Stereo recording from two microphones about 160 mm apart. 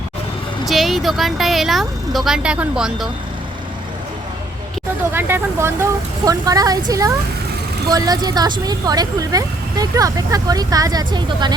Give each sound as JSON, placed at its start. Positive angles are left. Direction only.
{"t": 0.6, "sound": "speech", "side_deg": 0}
{"t": 5.1, "sound": "speech", "side_deg": -15}